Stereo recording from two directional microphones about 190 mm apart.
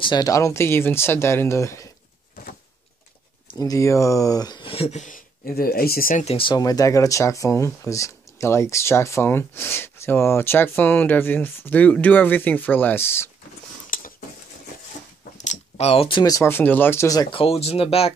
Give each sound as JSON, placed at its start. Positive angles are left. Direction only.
{"t": 0.0, "sound": "speech", "side_deg": 20}
{"t": 3.5, "sound": "speech", "side_deg": 20}
{"t": 6.2, "sound": "speech", "side_deg": 30}
{"t": 13.8, "sound": "a sound", "side_deg": 45}
{"t": 15.3, "sound": "speech", "side_deg": 35}